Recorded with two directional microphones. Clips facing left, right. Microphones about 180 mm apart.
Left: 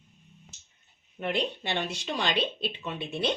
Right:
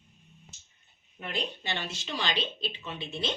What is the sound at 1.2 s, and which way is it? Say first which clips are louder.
Speech: left 5 dB; 60° left (ahead or behind).